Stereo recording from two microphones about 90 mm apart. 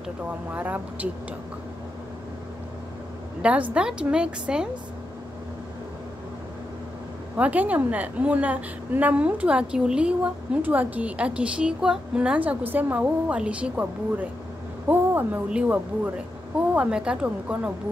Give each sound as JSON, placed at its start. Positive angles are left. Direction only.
{"t": 0.5, "sound": "a woman's voice", "side_deg": -20}
{"t": 3.4, "sound": "a woman's voice", "side_deg": -15}
{"t": 7.3, "sound": "a woman's voice", "side_deg": -15}